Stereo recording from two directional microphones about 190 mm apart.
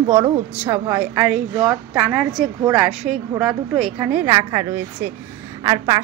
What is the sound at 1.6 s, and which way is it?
A woman's voice, 5° right (ahead or behind).